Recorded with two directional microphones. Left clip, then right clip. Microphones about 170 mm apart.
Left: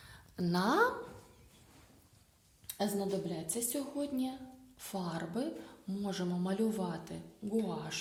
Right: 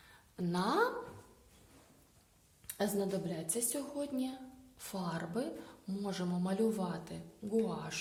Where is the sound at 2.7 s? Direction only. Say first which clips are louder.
Even; 5° right (ahead or behind).